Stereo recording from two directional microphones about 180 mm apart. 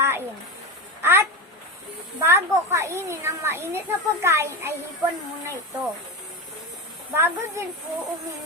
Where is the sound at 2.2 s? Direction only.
15° right (ahead or behind).